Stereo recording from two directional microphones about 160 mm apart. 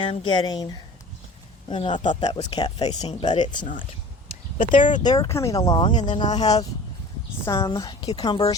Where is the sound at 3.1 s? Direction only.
45° left (ahead or behind).